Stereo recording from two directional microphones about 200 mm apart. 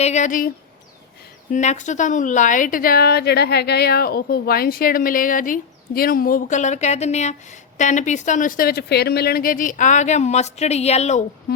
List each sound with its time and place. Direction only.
0.0 s a woman's voice: 35° left (ahead or behind)